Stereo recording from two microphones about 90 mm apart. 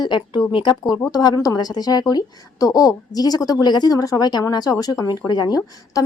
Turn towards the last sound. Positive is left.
turn(degrees=40)  # may be behind; listen again after turning